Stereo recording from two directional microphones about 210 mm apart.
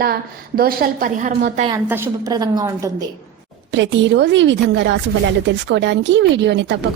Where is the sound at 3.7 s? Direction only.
60° right (ahead or behind).